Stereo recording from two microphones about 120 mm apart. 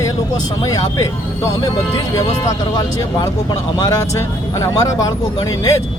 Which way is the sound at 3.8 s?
25° left (ahead or behind).